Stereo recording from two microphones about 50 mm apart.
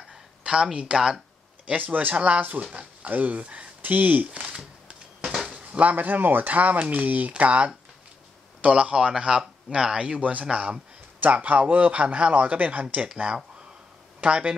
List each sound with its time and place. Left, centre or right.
0.4 s a sound: centre
0.7 s speech: centre
1.7 s speech: right
4.3 s a sound: right
5.5 s a man's voice: right
12.9 s speech: right